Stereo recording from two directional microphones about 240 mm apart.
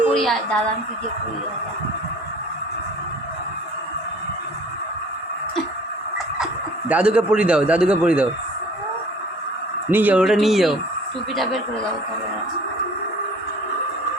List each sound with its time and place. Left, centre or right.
0.0 s a sound: centre
6.4 s speech: centre
9.9 s speech: centre